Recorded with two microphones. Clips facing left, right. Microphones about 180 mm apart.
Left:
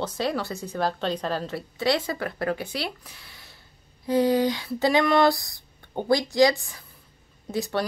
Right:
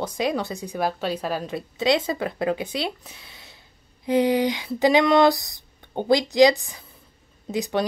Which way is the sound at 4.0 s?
15° right (ahead or behind).